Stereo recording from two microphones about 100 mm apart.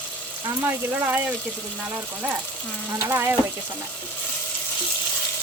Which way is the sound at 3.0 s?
25° right (ahead or behind).